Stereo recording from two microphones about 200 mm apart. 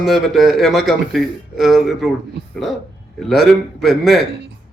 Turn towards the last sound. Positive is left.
turn(degrees=0)  # may be behind; listen again after turning